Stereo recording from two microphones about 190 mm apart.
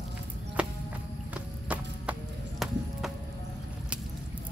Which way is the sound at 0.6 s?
5° right (ahead or behind).